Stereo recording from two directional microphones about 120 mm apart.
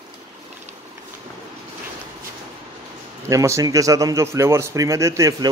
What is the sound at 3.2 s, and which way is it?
A man's voice, 25° right (ahead or behind).